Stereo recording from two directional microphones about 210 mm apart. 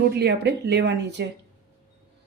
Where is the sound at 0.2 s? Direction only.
50° right (ahead or behind).